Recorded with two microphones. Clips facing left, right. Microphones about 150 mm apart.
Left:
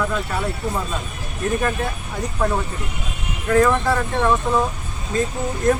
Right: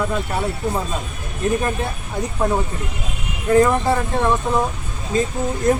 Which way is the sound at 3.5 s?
20° right (ahead or behind).